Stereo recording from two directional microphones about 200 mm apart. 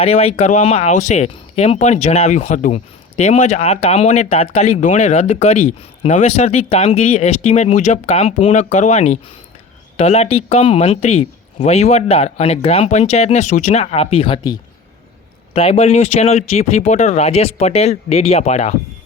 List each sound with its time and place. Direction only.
0.0 s speech: 30° left (ahead or behind)